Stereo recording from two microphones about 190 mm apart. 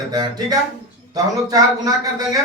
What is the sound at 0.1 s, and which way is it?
A man's voice, 20° right (ahead or behind).